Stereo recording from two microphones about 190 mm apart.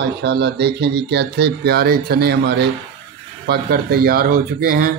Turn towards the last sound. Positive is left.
turn(degrees=-50)  # may be behind; listen again after turning